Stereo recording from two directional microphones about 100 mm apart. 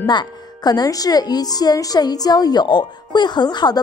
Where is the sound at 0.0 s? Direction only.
45° left (ahead or behind).